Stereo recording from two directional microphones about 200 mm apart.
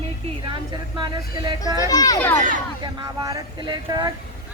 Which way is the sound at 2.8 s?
20° right (ahead or behind).